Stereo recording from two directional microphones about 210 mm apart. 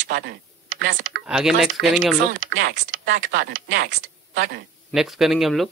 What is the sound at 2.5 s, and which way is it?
Speech, 55° right (ahead or behind).